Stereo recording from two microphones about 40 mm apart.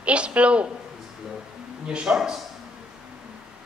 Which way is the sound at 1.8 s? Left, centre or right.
Right.